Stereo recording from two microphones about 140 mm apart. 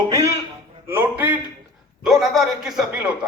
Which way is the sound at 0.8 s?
15° right (ahead or behind).